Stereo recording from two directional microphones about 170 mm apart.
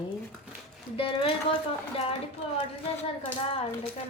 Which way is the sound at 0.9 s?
35° left (ahead or behind).